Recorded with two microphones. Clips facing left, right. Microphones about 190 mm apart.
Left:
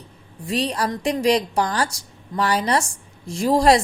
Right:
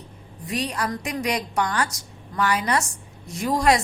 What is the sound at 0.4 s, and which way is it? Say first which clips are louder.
A woman's voice: left 4 dB; 30° left (ahead or behind).